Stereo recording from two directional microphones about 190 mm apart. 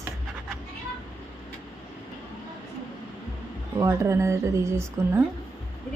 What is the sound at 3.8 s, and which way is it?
Speech, 15° right (ahead or behind).